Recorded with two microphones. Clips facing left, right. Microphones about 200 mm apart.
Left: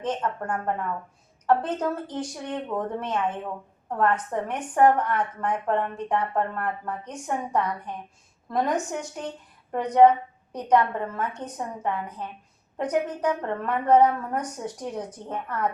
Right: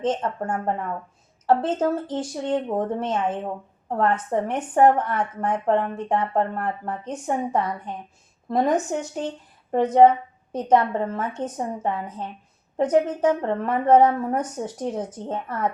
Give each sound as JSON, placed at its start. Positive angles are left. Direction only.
{"t": 0.0, "sound": "a woman's voice", "side_deg": -25}